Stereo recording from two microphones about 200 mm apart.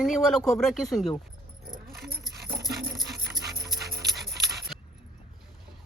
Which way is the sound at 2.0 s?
55° right (ahead or behind).